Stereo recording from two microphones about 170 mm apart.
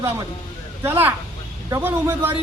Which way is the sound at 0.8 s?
10° right (ahead or behind).